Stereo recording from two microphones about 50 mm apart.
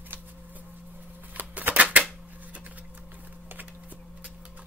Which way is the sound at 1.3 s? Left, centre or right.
Right.